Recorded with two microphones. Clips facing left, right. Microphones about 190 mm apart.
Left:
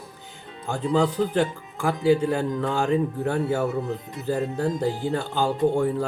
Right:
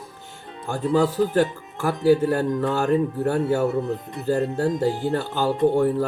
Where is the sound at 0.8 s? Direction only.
Centre (ahead or behind).